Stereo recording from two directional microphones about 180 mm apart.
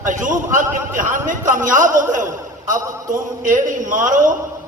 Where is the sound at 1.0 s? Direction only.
45° right (ahead or behind).